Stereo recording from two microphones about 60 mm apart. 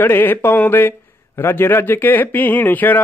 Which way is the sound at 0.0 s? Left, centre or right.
Left.